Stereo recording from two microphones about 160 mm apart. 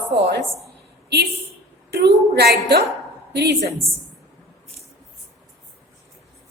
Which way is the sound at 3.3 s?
90° right.